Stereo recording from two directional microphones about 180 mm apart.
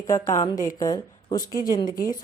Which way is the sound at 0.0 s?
20° left (ahead or behind).